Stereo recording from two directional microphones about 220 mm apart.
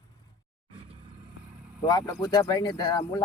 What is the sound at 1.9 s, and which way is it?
Speech, 15° left (ahead or behind).